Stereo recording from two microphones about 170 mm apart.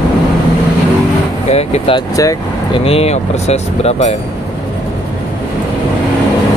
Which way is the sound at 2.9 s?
35° left (ahead or behind).